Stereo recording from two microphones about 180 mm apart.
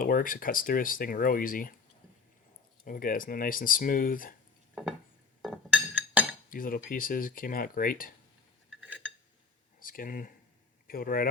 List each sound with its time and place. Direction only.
0.0 s speech: 50° left (ahead or behind)
2.8 s speech: 50° left (ahead or behind)
4.7 s stir: centre (ahead or behind)
5.4 s chink: 5° left (ahead or behind)
6.5 s speech: 50° left (ahead or behind)
9.8 s a man's voice: 50° left (ahead or behind)